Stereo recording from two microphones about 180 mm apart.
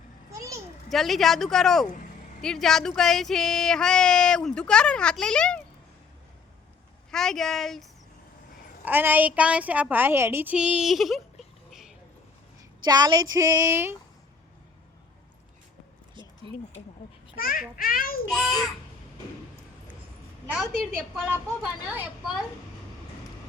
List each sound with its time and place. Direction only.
0.3 s a sound: 15° right (ahead or behind)
0.9 s speech: centre (ahead or behind)
7.1 s speech: 5° left (ahead or behind)
8.8 s a woman's voice: 10° right (ahead or behind)
12.8 s a woman's voice: 25° right (ahead or behind)
13.3 s a sound: 15° right (ahead or behind)
17.3 s a child's voice: 55° left (ahead or behind)
17.7 s child singing: 55° left (ahead or behind)
18.3 s speech: centre (ahead or behind)
20.5 s speech: centre (ahead or behind)